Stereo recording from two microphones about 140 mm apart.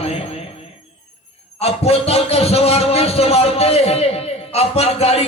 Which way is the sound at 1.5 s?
45° left (ahead or behind).